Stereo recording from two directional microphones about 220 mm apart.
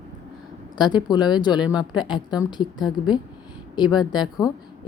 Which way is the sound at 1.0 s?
20° left (ahead or behind).